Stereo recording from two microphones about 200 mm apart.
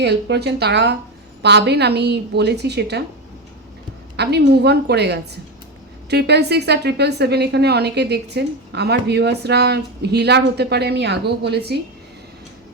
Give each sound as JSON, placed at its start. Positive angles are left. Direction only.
{"t": 0.0, "sound": "a woman's voice", "side_deg": -55}
{"t": 4.2, "sound": "a woman's voice", "side_deg": -55}